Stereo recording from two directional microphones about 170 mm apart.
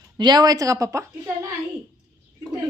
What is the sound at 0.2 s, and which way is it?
A woman's voice, 25° right (ahead or behind).